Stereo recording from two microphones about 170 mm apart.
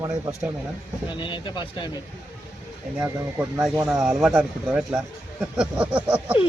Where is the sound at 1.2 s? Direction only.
30° left (ahead or behind).